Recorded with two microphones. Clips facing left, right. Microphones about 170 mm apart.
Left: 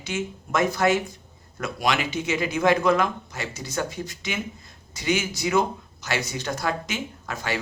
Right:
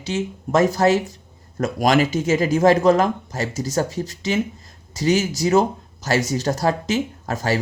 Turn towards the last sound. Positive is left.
turn(degrees=-40)  # may be behind; listen again after turning